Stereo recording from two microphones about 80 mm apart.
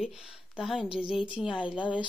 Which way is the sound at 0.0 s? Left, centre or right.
Centre.